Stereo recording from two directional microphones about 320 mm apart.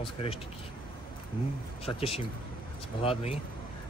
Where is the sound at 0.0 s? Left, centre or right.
Centre.